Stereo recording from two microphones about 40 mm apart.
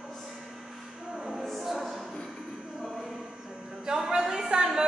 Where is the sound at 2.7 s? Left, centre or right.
Centre.